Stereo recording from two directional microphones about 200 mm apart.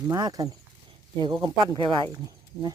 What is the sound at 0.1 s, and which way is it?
Speech, 20° right (ahead or behind).